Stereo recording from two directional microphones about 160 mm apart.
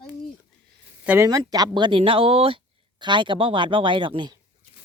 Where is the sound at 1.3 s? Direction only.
25° right (ahead or behind).